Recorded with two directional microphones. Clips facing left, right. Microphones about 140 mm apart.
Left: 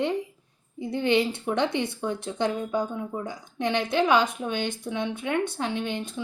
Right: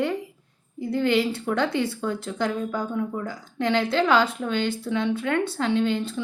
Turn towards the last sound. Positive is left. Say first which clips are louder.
# right 7 dB
turn(degrees=15)  # may be behind; listen again after turning